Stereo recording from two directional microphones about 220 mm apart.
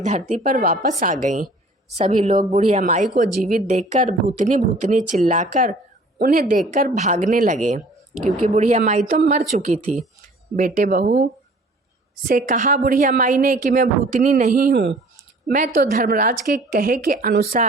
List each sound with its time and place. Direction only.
0.0 s a woman's voice: 35° right (ahead or behind)